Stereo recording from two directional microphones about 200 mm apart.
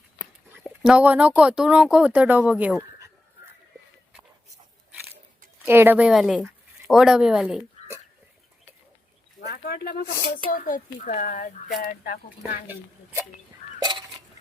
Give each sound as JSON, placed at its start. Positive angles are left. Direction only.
{"t": 0.9, "sound": "speech", "side_deg": -5}
{"t": 5.6, "sound": "a woman's voice", "side_deg": -10}
{"t": 9.5, "sound": "a child's voice", "side_deg": 50}
{"t": 13.7, "sound": "a sound", "side_deg": -20}